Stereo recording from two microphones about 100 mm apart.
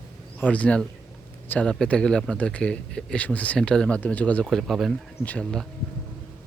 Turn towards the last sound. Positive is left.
turn(degrees=5)  # may be behind; listen again after turning